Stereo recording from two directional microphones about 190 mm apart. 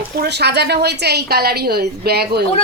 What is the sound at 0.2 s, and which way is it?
A woman's voice, 60° right (ahead or behind).